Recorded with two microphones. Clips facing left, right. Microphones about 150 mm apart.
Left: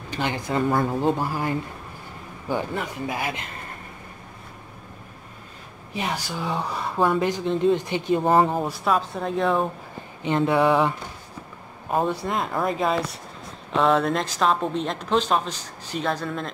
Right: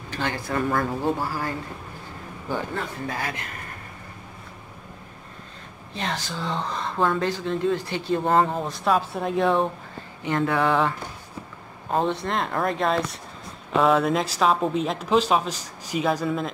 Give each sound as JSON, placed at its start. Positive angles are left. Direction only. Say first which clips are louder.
{"t": 0.1, "sound": "speech", "louder": "left 2 dB", "side_deg": 15}
{"t": 2.5, "sound": "speech", "louder": "left 2 dB", "side_deg": 15}
{"t": 5.9, "sound": "speech", "louder": "left 2 dB", "side_deg": 10}
{"t": 10.2, "sound": "a sound", "louder": "left 3 dB", "side_deg": 20}
{"t": 11.9, "sound": "speech", "louder": "even", "side_deg": 10}